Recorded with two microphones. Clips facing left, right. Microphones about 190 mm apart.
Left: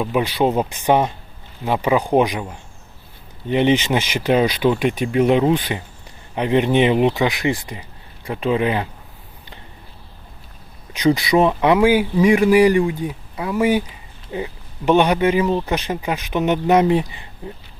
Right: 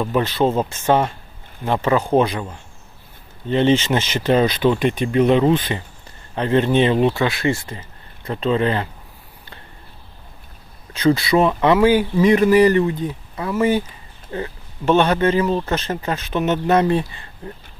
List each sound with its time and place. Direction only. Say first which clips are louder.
0.0 s speech: even; 10° left (ahead or behind)
10.9 s speech: even; 15° left (ahead or behind)